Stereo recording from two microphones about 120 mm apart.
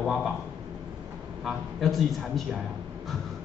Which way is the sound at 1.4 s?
Centre (ahead or behind).